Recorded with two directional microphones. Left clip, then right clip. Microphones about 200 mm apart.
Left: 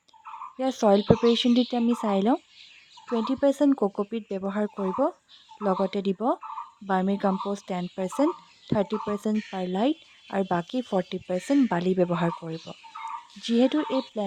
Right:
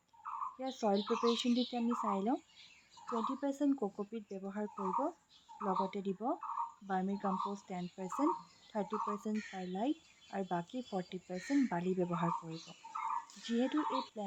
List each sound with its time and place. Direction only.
0.6 s speech: 60° left (ahead or behind)